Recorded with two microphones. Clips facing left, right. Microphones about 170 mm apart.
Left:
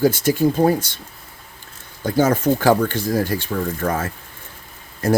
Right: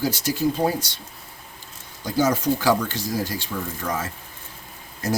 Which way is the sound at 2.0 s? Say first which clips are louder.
Left 4 dB; 55° left (ahead or behind).